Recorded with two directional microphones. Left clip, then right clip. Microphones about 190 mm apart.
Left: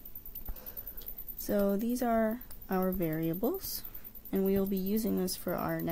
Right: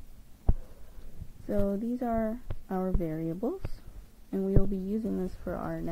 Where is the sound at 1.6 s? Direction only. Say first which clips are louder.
Left 1 dB; 5° left (ahead or behind).